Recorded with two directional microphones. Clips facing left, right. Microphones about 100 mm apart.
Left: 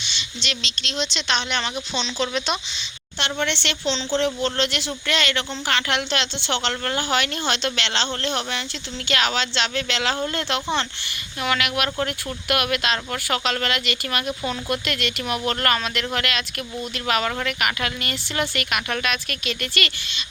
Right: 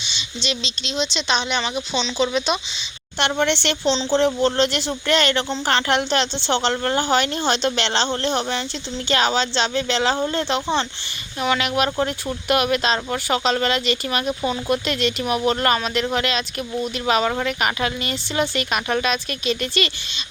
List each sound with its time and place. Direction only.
0.0 s a sound: 15° right (ahead or behind)
0.9 s speech: 10° right (ahead or behind)
3.2 s speech: 45° right (ahead or behind); by 20.2 s 20° right (ahead or behind)